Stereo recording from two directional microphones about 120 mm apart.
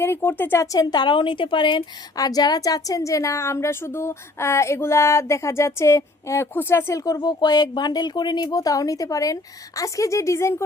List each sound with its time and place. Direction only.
0.0 s a woman's voice: 20° left (ahead or behind)